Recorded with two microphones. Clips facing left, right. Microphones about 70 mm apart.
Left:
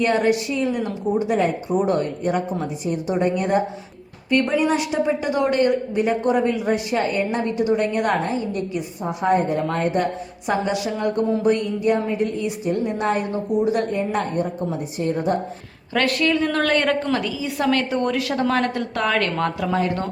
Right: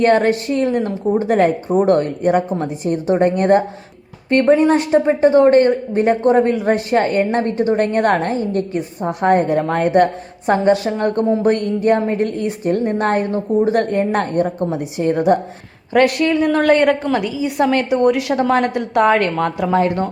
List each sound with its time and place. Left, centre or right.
0.0 s speech: right
0.9 s a woman's voice: right
1.3 s speech: right
4.3 s speech: right
10.4 s speech: right
13.3 s a woman's voice: right
13.7 s a woman's voice: right
15.9 s a woman's voice: right